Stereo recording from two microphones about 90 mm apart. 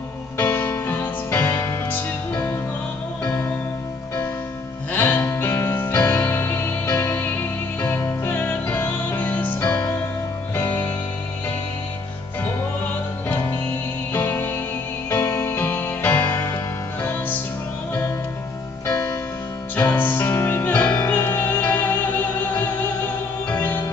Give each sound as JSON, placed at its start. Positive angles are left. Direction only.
{"t": 0.4, "sound": "music", "side_deg": 25}
{"t": 3.3, "sound": "music", "side_deg": 10}
{"t": 4.9, "sound": "music", "side_deg": 20}
{"t": 14.1, "sound": "music", "side_deg": 25}
{"t": 15.5, "sound": "music", "side_deg": 20}
{"t": 19.7, "sound": "music", "side_deg": 20}
{"t": 23.5, "sound": "music", "side_deg": 20}